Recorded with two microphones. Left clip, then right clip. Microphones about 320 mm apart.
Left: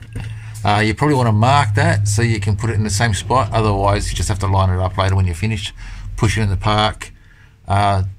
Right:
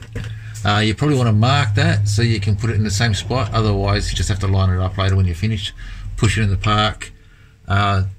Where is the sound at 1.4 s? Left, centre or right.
Left.